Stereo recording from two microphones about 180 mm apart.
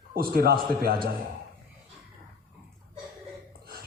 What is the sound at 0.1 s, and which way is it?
A man's voice, 55° right (ahead or behind).